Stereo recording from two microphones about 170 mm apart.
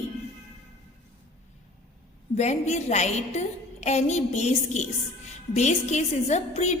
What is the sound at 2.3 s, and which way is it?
A woman's voice, 40° left (ahead or behind).